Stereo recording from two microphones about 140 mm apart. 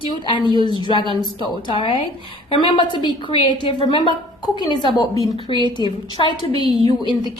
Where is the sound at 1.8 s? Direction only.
35° left (ahead or behind).